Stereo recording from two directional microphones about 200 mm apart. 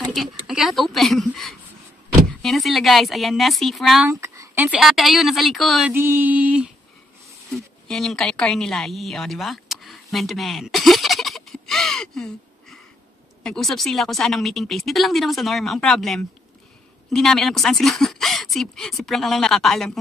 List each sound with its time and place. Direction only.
0.0 s a sound: centre (ahead or behind)
2.4 s speech: centre (ahead or behind)
4.1 s a woman's voice: 15° right (ahead or behind)